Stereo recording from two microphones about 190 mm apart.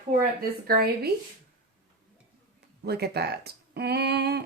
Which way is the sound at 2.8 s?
55° right (ahead or behind).